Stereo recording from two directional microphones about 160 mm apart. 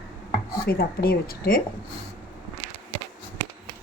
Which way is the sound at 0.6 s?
70° left (ahead or behind).